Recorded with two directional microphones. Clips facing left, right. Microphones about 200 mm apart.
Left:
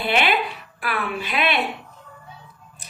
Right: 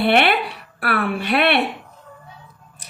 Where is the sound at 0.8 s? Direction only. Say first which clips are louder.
Right 5 dB; 60° right (ahead or behind).